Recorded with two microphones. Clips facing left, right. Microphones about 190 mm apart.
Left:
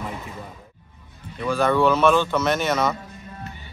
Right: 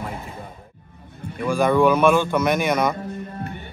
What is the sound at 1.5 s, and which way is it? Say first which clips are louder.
Speech: right 2 dB; 15° right (ahead or behind).